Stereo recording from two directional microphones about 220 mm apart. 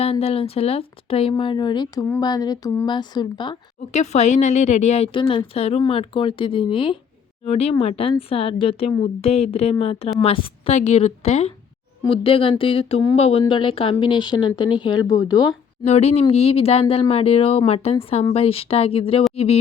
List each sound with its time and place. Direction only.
0.0 s speech: 25° left (ahead or behind)
3.9 s a woman's voice: 30° left (ahead or behind)